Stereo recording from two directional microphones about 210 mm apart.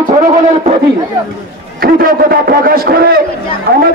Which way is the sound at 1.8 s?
45° right (ahead or behind).